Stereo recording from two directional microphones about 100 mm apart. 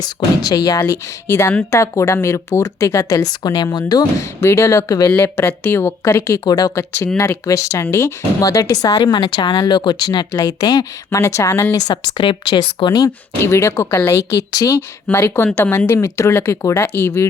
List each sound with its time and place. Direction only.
0.0 s speech: 40° left (ahead or behind)
0.9 s speech: 30° left (ahead or behind)
4.2 s speech: 30° left (ahead or behind)
5.1 s speech: 20° left (ahead or behind)
6.4 s speech: 40° left (ahead or behind)
7.2 s speech: 30° left (ahead or behind)
11.7 s speech: 45° left (ahead or behind)
13.4 s speech: 30° left (ahead or behind)
14.8 s speech: 20° left (ahead or behind)